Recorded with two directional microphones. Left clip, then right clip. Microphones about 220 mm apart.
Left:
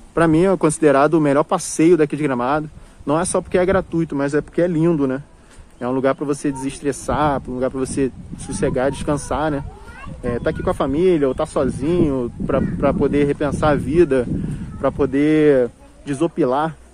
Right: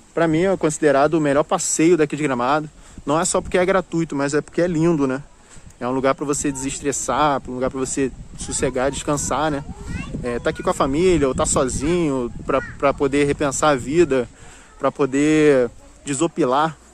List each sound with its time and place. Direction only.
0.1 s speech: centre (ahead or behind); by 16.7 s 20° right (ahead or behind)